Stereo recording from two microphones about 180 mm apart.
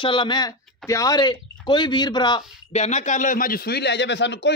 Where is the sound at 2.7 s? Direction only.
40° left (ahead or behind); by 4.5 s 75° left (ahead or behind).